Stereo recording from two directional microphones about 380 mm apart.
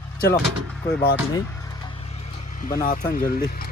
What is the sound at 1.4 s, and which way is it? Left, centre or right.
Vehicle, centre.